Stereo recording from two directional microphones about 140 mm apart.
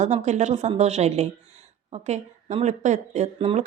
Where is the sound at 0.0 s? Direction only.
60° right (ahead or behind).